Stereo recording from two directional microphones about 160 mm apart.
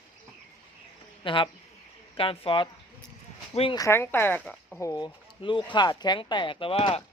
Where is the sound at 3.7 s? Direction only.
20° left (ahead or behind).